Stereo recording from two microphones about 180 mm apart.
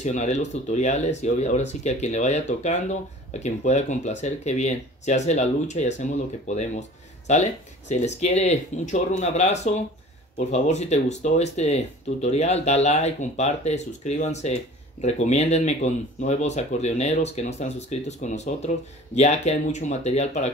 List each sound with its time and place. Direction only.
0.0 s speech: 40° left (ahead or behind)